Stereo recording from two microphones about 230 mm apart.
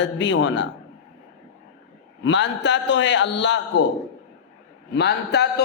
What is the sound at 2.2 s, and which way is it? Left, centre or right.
A man's voice, left.